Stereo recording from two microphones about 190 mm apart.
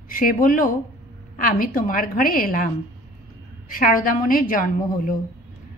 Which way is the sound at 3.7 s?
45° left (ahead or behind).